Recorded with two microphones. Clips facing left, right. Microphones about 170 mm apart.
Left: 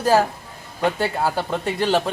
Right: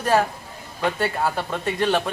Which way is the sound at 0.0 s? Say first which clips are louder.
Left 3 dB; 35° left (ahead or behind).